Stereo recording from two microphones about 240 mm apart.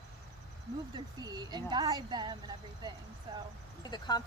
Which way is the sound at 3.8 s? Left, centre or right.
Centre.